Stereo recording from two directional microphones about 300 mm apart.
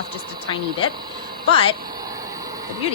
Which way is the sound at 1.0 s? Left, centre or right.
Centre.